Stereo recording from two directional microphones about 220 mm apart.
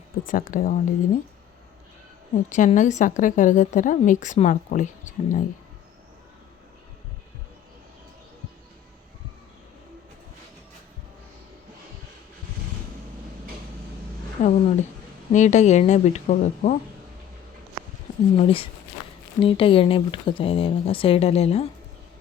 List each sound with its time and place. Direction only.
0.3 s a woman's voice: 40° left (ahead or behind)
2.3 s a woman's voice: 35° left (ahead or behind)
14.4 s a woman's voice: 30° left (ahead or behind)
18.3 s speech: 25° left (ahead or behind)